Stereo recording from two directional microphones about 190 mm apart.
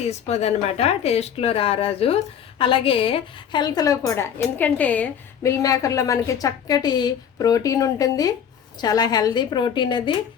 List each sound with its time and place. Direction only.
0.1 s a woman's voice: 35° left (ahead or behind)